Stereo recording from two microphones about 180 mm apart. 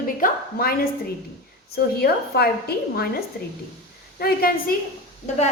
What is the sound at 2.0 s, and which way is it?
A woman's voice, 60° left (ahead or behind).